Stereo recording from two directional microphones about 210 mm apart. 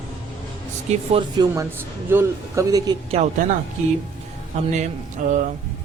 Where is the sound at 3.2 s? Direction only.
30° right (ahead or behind).